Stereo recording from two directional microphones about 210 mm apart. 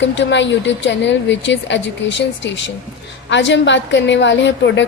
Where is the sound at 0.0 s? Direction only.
60° left (ahead or behind).